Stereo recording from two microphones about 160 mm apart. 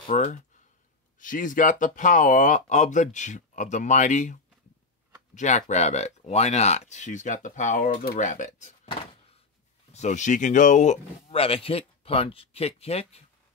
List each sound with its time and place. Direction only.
0.1 s speech: 55° left (ahead or behind)
9.9 s speech: 50° left (ahead or behind)